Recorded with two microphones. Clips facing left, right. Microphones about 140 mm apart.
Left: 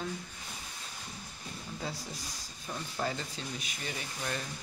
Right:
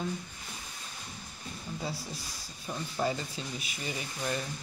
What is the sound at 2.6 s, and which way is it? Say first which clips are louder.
Speech: right 4 dB; 10° right (ahead or behind).